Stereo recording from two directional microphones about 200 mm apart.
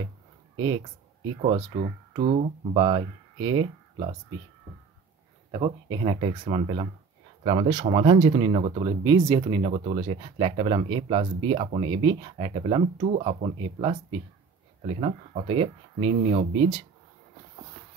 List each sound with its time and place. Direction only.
2.1 s speech: 30° right (ahead or behind)
5.5 s speech: 25° right (ahead or behind)